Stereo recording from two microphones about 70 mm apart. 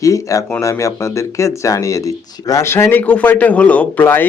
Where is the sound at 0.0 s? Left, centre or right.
Left.